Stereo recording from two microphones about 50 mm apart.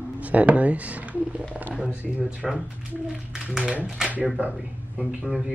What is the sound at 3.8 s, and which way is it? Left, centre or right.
Speech, centre.